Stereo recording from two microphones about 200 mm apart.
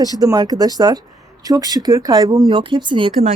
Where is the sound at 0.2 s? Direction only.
20° right (ahead or behind).